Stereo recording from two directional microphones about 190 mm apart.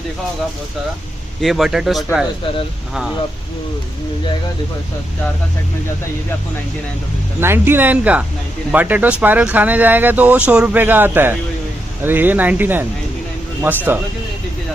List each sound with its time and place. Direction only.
1.4 s a man's voice: centre (ahead or behind)
7.4 s speech: 10° right (ahead or behind)